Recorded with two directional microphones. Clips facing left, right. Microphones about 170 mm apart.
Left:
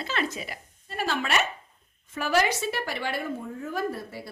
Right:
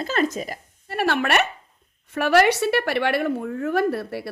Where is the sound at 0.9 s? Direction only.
65° right (ahead or behind).